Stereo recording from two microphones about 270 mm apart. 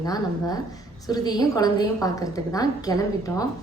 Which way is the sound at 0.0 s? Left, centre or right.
Centre.